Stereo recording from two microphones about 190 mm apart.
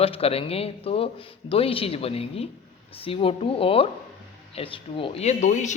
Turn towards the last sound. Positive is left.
turn(degrees=40)  # may be behind; listen again after turning